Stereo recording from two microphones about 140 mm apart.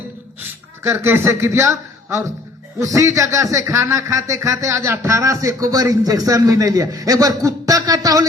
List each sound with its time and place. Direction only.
0.3 s a man's voice: 15° right (ahead or behind)